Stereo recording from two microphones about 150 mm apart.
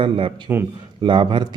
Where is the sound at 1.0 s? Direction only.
35° right (ahead or behind).